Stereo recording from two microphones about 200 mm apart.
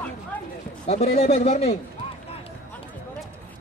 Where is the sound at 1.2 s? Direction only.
30° left (ahead or behind).